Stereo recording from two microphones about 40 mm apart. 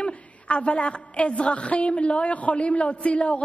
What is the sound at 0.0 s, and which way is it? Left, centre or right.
A woman's voice, left.